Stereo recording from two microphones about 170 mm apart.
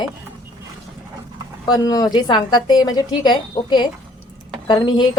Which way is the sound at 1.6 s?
20° left (ahead or behind).